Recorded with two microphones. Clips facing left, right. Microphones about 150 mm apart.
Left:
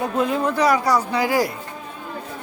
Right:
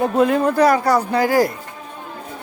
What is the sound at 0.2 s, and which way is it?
Speech, 50° right (ahead or behind).